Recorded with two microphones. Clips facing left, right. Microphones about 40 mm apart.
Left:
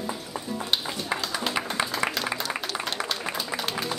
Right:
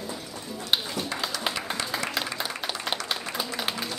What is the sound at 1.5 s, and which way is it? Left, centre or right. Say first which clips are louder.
Music: left 3 dB; left.